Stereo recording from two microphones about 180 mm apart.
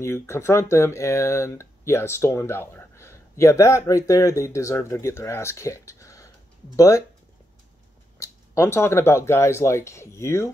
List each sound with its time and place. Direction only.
0.0 s speech: 15° left (ahead or behind)
8.2 s speech: 15° left (ahead or behind)